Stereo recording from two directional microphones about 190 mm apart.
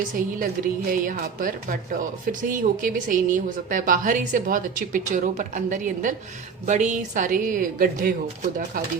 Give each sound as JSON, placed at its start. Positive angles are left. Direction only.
{"t": 0.9, "sound": "speech", "side_deg": -45}